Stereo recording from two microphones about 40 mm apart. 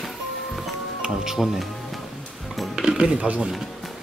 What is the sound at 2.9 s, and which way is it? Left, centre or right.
Speech, right.